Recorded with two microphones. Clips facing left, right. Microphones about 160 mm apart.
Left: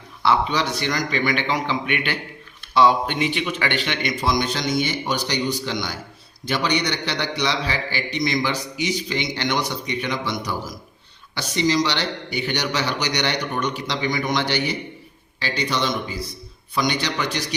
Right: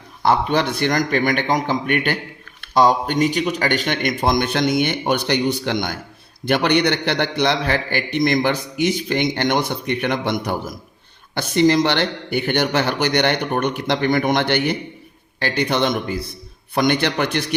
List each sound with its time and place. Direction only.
0.2 s a man's voice: 50° right (ahead or behind)